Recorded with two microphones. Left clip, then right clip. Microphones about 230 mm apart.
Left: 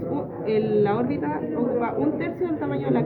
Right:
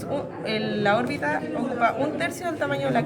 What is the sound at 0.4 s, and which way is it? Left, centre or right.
A woman's voice, right.